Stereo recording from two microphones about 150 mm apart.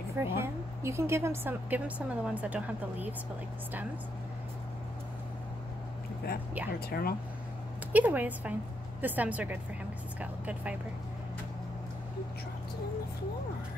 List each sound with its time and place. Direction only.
0.2 s a woman's voice: 15° right (ahead or behind)
6.9 s speech: 90° left
7.9 s a woman's voice: 10° right (ahead or behind)